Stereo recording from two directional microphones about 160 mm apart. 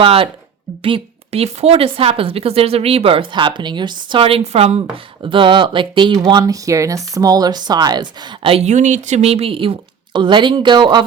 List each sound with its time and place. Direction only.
0.0 s speech: 35° right (ahead or behind)